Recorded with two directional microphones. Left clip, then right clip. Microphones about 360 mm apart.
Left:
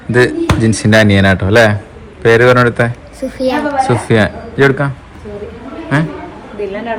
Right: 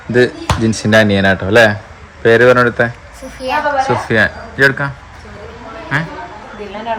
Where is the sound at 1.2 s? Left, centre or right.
Left.